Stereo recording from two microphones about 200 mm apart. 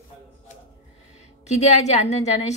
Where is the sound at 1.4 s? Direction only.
35° left (ahead or behind).